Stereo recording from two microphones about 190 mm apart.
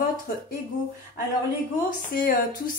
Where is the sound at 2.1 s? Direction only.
50° left (ahead or behind).